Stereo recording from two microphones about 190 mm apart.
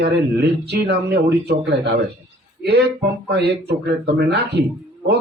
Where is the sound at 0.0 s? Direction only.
60° right (ahead or behind).